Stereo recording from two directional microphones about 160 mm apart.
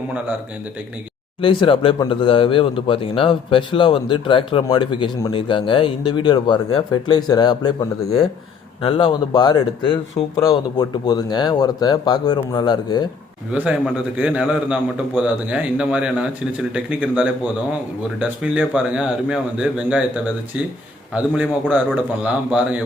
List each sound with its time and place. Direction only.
1.4 s speech: 35° left (ahead or behind)
13.5 s a man's voice: 5° right (ahead or behind)
21.1 s a man's voice: 10° right (ahead or behind)